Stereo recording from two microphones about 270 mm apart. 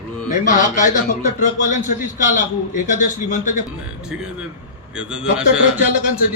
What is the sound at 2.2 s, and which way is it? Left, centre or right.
A man's voice, left.